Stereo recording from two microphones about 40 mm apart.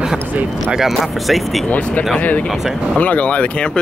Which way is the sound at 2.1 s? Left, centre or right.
Left.